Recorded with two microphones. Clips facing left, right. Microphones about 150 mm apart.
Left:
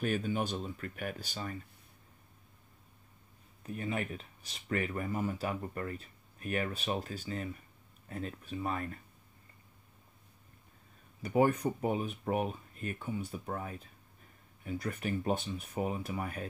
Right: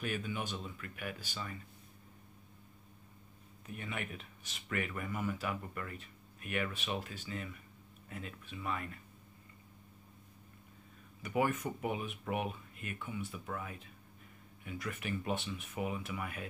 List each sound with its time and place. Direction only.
0.0 s speech: 40° left (ahead or behind)
3.6 s speech: 35° left (ahead or behind)
11.2 s speech: 35° left (ahead or behind)